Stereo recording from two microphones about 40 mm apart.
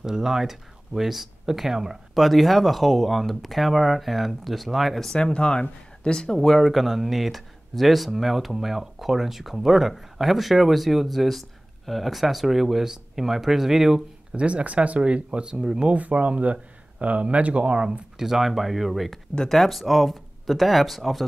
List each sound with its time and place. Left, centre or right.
0.0 s speech: centre
5.1 s speech: left; by 14.0 s centre
14.3 s speech: right
15.6 s speech: centre
15.9 s speech: right
18.2 s speech: centre